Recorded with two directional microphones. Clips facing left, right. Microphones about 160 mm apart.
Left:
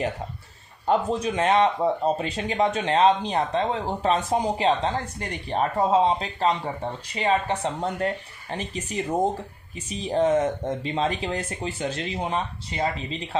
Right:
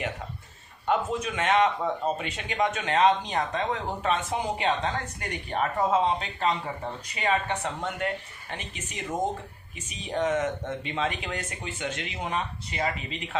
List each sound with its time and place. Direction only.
0.9 s speech: 35° left (ahead or behind)